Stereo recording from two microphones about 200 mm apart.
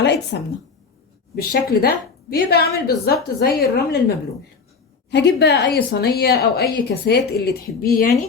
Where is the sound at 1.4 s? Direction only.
50° left (ahead or behind).